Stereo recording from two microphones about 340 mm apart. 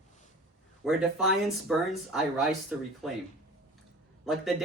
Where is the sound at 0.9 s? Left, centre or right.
Centre.